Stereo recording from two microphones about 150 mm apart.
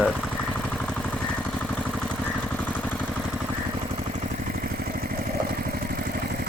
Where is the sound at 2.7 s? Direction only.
10° left (ahead or behind).